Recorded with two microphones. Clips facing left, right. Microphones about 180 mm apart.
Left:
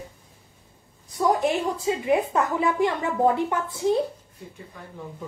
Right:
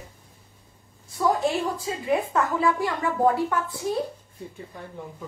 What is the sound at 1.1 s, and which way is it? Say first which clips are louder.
A woman's voice: left 1 dB; 20° left (ahead or behind).